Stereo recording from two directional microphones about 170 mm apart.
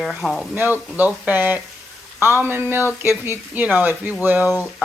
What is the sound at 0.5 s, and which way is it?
Speech, 10° right (ahead or behind).